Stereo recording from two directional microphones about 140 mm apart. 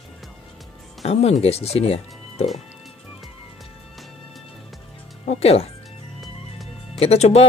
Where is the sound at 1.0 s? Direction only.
45° left (ahead or behind).